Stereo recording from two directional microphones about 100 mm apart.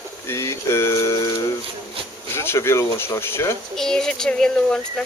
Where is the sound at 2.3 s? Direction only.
25° left (ahead or behind).